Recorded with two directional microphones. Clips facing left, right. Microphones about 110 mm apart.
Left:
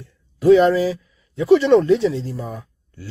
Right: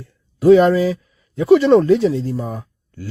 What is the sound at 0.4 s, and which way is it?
Speech, 40° right (ahead or behind).